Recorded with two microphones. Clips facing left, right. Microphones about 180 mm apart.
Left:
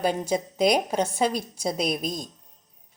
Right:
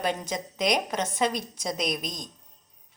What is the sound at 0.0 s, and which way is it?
A woman's voice, 30° left (ahead or behind).